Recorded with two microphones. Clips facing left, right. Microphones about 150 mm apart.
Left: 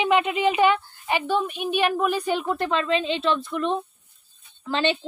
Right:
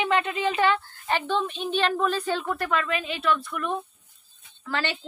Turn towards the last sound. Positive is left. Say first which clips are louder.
# left 6 dB
turn(degrees=20)  # may be behind; listen again after turning